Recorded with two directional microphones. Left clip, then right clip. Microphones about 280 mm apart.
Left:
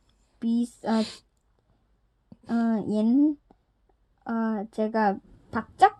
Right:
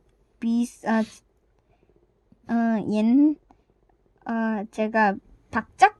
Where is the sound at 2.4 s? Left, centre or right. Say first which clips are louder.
Right 3 dB; right.